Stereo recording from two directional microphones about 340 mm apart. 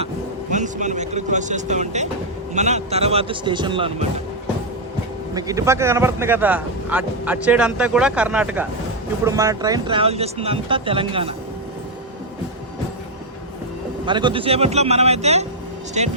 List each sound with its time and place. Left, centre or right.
0.5 s speech: right
5.3 s speech: centre
14.0 s speech: centre